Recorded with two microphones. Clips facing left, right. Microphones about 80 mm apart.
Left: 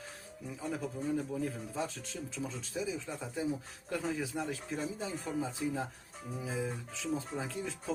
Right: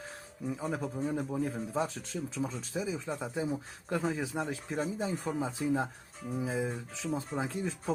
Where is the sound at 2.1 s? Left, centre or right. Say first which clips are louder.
Right 5 dB; centre.